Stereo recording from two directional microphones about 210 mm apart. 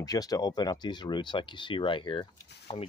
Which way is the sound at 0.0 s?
15° left (ahead or behind).